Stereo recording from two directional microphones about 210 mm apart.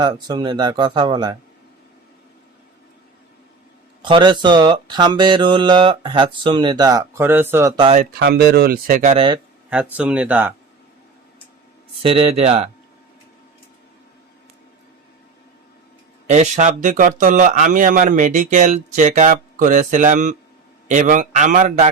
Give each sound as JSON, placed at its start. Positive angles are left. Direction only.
{"t": 0.0, "sound": "speech", "side_deg": -20}
{"t": 4.0, "sound": "speech", "side_deg": -20}
{"t": 7.8, "sound": "speech", "side_deg": -30}
{"t": 8.2, "sound": "speech", "side_deg": -50}
{"t": 9.6, "sound": "speech", "side_deg": -5}
{"t": 12.0, "sound": "speech", "side_deg": -25}
{"t": 16.2, "sound": "speech", "side_deg": -35}